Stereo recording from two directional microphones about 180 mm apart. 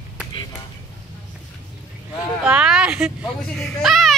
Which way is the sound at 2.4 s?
5° right (ahead or behind).